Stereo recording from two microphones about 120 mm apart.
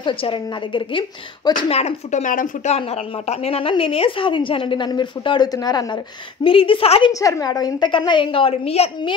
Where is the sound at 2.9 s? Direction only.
60° left (ahead or behind); by 5.9 s 35° left (ahead or behind).